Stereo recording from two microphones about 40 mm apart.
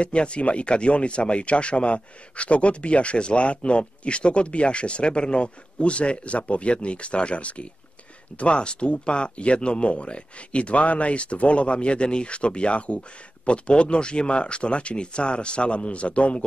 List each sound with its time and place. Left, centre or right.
0.0 s speech: left